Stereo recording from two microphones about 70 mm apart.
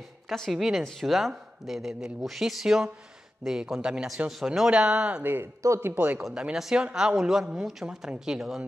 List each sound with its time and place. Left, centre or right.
0.3 s speech: centre
5.2 s speech: right
5.9 s speech: centre
6.2 s speech: centre